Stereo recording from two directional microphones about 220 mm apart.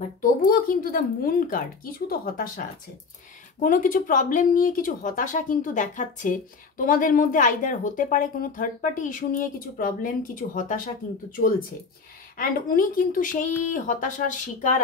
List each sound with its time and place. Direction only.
0.2 s a woman's voice: 40° left (ahead or behind)
12.4 s a woman's voice: 40° left (ahead or behind)